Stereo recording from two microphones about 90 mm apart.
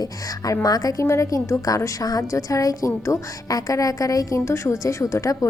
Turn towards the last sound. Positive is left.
turn(degrees=35)  # may be behind; listen again after turning